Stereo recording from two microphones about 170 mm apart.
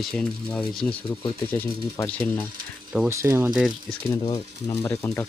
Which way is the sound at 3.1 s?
15° right (ahead or behind).